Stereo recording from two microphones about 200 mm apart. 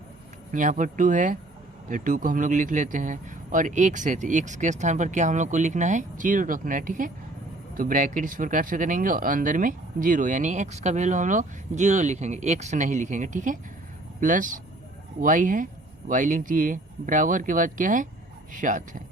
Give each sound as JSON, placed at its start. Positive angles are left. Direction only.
{"t": 0.5, "sound": "speech", "side_deg": -40}